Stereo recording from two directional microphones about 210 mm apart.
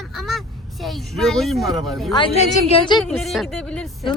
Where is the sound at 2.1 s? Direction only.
25° left (ahead or behind).